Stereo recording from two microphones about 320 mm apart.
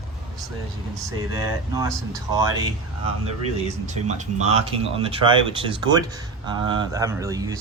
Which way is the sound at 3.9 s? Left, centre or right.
Right.